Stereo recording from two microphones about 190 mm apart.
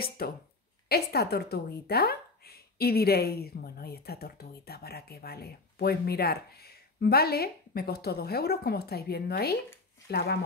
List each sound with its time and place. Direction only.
0.2 s a woman's voice: 55° left (ahead or behind)